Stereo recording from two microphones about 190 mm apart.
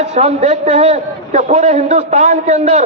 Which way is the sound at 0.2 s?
35° right (ahead or behind).